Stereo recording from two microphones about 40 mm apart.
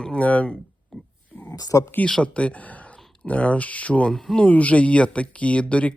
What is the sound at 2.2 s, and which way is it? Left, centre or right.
Speech, left.